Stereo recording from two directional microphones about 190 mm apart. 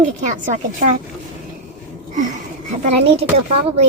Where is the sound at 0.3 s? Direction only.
40° right (ahead or behind).